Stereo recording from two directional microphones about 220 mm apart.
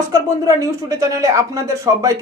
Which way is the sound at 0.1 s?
15° right (ahead or behind).